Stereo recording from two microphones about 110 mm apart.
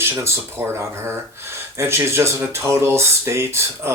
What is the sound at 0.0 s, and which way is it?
Speech, 25° right (ahead or behind).